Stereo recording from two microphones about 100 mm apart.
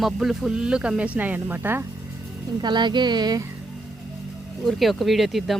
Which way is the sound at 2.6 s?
50° right (ahead or behind).